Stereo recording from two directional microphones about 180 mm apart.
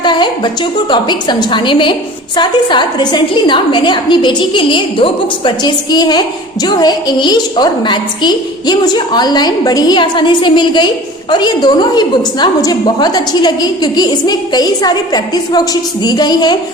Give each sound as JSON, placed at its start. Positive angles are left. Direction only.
{"t": 0.0, "sound": "a woman's voice", "side_deg": 25}